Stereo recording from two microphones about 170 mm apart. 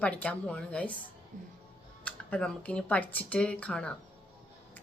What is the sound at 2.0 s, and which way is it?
Speech, 5° left (ahead or behind).